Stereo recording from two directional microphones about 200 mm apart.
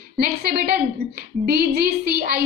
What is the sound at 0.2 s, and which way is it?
A woman's voice, 50° right (ahead or behind).